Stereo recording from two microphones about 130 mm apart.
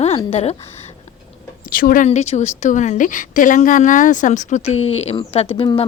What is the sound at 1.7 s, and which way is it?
A woman's voice, 90° left.